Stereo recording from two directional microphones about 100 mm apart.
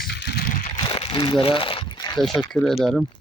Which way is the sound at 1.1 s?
55° left (ahead or behind).